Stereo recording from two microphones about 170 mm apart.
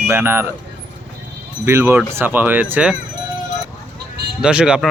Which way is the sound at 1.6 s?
15° right (ahead or behind).